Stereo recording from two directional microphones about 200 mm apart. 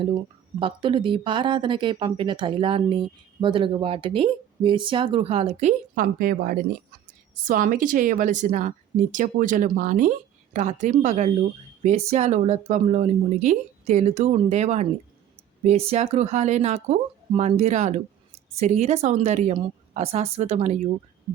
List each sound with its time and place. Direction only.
0.6 s speech: 25° right (ahead or behind)